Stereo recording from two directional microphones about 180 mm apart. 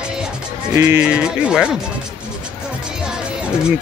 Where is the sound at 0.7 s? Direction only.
10° right (ahead or behind).